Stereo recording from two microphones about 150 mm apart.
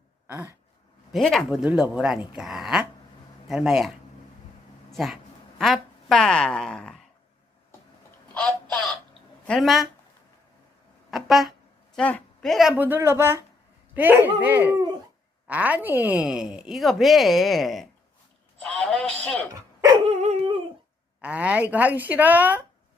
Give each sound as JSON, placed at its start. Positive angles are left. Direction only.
{"t": 0.3, "sound": "throat clearing", "side_deg": -15}
{"t": 1.1, "sound": "a woman's voice", "side_deg": 0}
{"t": 8.3, "sound": "a sound", "side_deg": 5}
{"t": 9.5, "sound": "speech", "side_deg": 0}
{"t": 11.1, "sound": "speech", "side_deg": 0}
{"t": 18.6, "sound": "a sound", "side_deg": 5}
{"t": 19.2, "sound": "speech", "side_deg": 10}
{"t": 19.5, "sound": "dog", "side_deg": -20}
{"t": 20.1, "sound": "dog", "side_deg": -40}
{"t": 21.2, "sound": "speech", "side_deg": -10}